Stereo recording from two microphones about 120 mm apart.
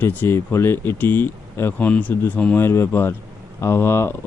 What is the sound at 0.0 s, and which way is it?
Speech, 15° left (ahead or behind).